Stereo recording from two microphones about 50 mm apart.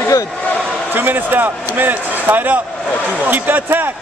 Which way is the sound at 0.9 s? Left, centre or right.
Right.